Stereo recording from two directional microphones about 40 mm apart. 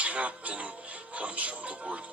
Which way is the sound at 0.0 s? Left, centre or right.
Right.